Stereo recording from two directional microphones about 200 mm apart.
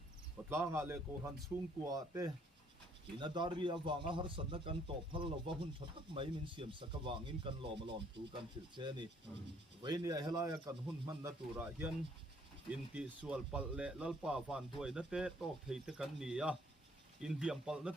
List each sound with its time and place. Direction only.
0.5 s speech: 15° right (ahead or behind)
12.9 s speech: 5° right (ahead or behind)